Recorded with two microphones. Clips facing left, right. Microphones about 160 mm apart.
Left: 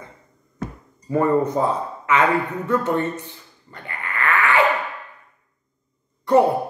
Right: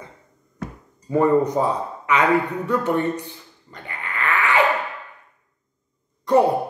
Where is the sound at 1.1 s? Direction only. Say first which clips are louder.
Right 1 dB; 15° right (ahead or behind).